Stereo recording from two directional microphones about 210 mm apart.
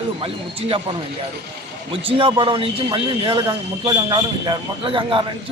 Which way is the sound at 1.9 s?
25° right (ahead or behind).